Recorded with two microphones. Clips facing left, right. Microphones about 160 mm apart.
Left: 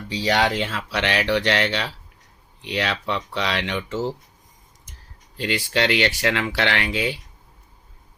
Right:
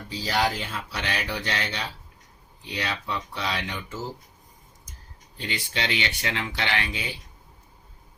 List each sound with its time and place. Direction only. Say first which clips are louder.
0.1 s speech: left 5 dB; 75° left (ahead or behind)
5.4 s speech: left 8 dB; 75° left (ahead or behind)